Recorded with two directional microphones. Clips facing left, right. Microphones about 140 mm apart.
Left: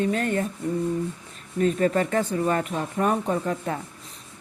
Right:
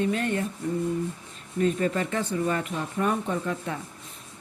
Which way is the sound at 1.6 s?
45° left (ahead or behind).